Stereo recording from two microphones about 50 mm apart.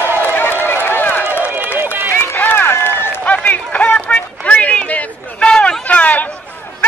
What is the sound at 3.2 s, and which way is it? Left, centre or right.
Run, left.